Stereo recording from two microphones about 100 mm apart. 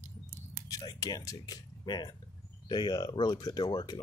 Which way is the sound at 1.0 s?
35° left (ahead or behind).